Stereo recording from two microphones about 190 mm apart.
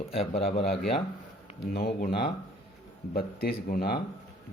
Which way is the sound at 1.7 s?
55° left (ahead or behind).